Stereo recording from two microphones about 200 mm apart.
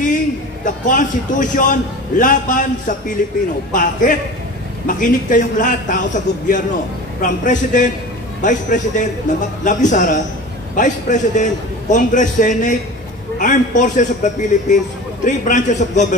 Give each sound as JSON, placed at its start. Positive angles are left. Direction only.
{"t": 0.7, "sound": "a man's voice", "side_deg": 40}